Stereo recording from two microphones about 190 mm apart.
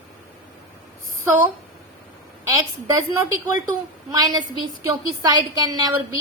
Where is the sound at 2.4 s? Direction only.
15° right (ahead or behind).